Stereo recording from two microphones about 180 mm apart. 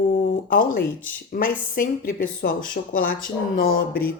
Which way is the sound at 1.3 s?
55° left (ahead or behind).